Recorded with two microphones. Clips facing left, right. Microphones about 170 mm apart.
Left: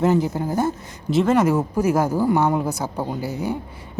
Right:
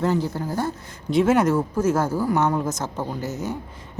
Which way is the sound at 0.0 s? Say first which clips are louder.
Left 4 dB; 15° left (ahead or behind).